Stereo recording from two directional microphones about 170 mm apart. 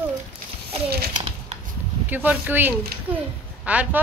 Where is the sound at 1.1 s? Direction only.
40° right (ahead or behind).